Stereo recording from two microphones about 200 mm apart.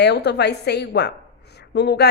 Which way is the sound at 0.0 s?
55° left (ahead or behind).